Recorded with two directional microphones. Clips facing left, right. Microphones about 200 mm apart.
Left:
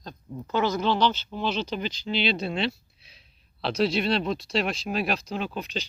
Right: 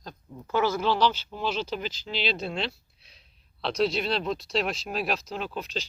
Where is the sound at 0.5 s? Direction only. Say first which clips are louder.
Even; 5° right (ahead or behind).